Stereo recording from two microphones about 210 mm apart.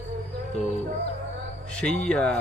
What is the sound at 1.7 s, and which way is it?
Speech, 5° left (ahead or behind).